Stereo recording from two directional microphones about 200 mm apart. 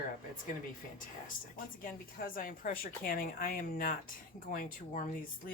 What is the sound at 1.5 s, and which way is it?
Speech, 45° left (ahead or behind).